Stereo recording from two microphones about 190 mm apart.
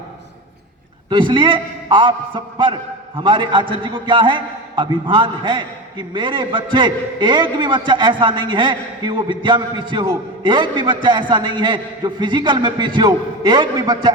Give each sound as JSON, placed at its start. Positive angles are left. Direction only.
{"t": 1.1, "sound": "a man's voice", "side_deg": -25}